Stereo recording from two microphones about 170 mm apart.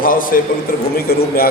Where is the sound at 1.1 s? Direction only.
60° left (ahead or behind).